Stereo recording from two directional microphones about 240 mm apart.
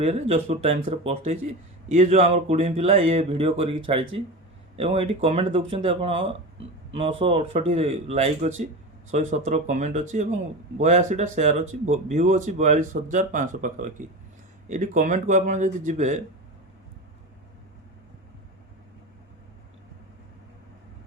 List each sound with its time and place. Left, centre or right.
0.0 s speech: right